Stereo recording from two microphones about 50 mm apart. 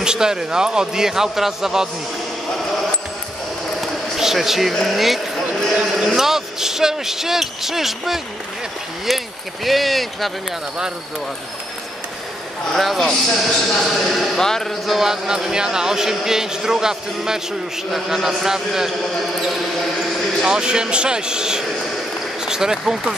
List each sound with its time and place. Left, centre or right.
0.0 s a man's voice: centre
3.8 s a sound: centre
4.7 s a man's voice: centre
9.7 s speech: centre
12.7 s speech: centre
14.9 s a man's voice: centre
20.4 s a man's voice: centre